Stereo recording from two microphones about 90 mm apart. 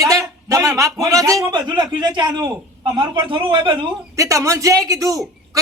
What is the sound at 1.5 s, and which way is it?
A man's voice, 55° right (ahead or behind).